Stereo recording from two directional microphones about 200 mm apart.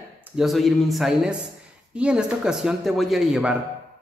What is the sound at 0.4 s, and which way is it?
Speech, centre (ahead or behind).